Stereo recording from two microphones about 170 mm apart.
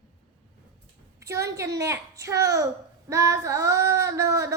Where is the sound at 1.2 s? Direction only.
15° right (ahead or behind).